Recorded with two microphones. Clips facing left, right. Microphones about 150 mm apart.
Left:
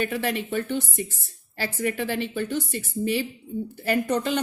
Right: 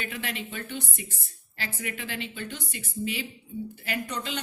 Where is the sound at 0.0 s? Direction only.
45° left (ahead or behind).